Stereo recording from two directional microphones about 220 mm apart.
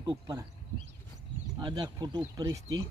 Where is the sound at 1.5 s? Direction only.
20° right (ahead or behind).